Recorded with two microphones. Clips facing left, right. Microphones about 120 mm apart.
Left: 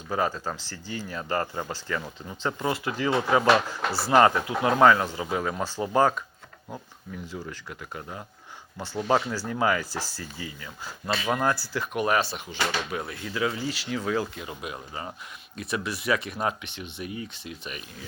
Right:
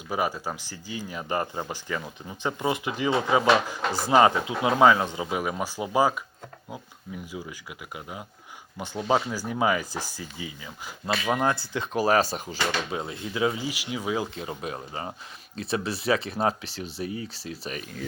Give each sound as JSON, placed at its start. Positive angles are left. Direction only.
{"t": 0.1, "sound": "speech", "side_deg": -10}
{"t": 7.3, "sound": "speech", "side_deg": -10}
{"t": 12.9, "sound": "speech", "side_deg": -20}
{"t": 14.3, "sound": "speech", "side_deg": -35}